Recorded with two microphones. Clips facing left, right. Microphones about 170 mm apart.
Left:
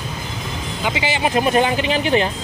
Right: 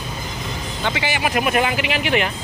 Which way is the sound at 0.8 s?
20° left (ahead or behind).